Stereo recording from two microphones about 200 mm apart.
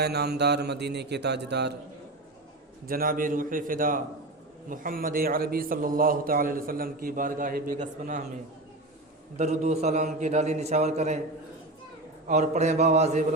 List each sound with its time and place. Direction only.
0.0 s speech: 55° right (ahead or behind)
2.8 s a man's voice: 45° right (ahead or behind)
9.4 s a man's voice: 35° right (ahead or behind)
12.3 s a man's voice: 35° right (ahead or behind)